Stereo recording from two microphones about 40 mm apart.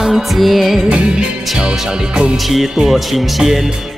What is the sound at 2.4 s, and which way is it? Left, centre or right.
Music, centre.